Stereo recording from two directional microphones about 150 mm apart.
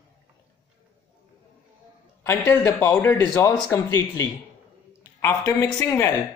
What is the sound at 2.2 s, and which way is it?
Speech, 15° left (ahead or behind).